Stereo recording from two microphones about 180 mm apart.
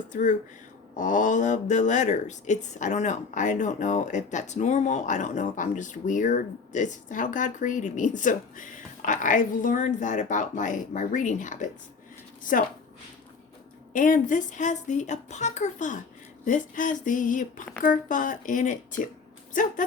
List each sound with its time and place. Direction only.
0.1 s speech: 45° left (ahead or behind)
13.9 s speech: 45° left (ahead or behind)